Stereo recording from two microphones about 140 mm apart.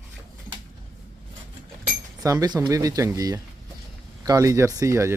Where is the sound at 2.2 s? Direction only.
25° right (ahead or behind).